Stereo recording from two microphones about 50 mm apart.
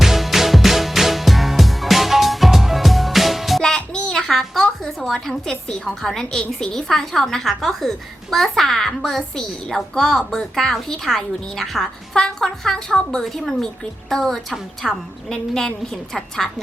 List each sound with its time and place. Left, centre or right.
0.0 s music: centre
3.6 s music: centre
4.1 s a sound: centre
5.2 s a woman's voice: centre
13.2 s a woman's voice: centre
14.5 s a woman's voice: centre
15.3 s a woman's voice: centre